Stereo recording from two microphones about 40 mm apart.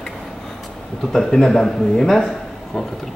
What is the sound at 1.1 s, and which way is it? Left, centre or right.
A man's voice, centre.